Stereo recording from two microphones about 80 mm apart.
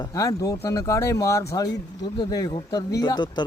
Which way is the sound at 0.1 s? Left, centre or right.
Left.